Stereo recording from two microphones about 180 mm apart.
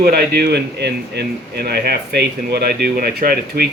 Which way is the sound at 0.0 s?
60° right (ahead or behind).